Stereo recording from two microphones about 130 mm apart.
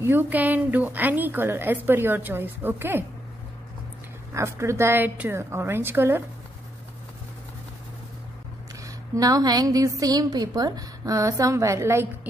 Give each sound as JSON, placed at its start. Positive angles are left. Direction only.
{"t": 0.0, "sound": "a woman's voice", "side_deg": -15}
{"t": 4.3, "sound": "a woman's voice", "side_deg": -20}
{"t": 8.8, "sound": "a woman's voice", "side_deg": -25}